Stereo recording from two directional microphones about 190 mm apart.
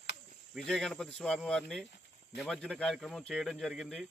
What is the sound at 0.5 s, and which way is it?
Speech, centre (ahead or behind).